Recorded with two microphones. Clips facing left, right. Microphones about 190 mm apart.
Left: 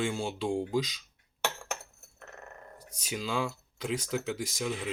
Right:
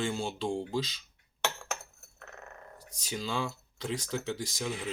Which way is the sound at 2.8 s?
10° left (ahead or behind).